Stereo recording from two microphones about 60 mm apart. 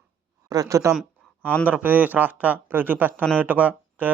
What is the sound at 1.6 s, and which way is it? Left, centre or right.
Speech, right.